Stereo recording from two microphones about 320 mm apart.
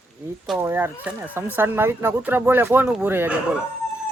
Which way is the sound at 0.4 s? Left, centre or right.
Centre.